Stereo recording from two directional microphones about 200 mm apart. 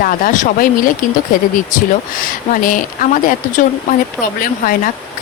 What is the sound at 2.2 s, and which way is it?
Speech, 40° left (ahead or behind).